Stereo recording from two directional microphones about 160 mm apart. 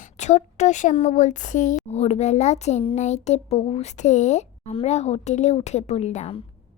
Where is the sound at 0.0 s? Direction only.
45° left (ahead or behind).